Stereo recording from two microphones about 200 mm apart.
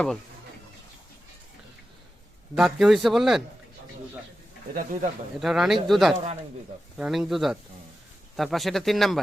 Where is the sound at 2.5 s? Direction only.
Centre (ahead or behind).